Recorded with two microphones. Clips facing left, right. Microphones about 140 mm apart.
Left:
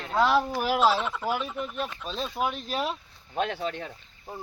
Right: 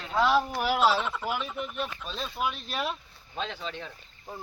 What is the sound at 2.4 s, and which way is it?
Speech, 40° left (ahead or behind).